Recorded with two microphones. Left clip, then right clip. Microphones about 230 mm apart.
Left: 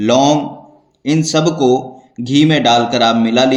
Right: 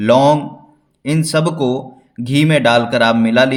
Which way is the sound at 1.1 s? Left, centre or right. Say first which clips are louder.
Left 3 dB; right.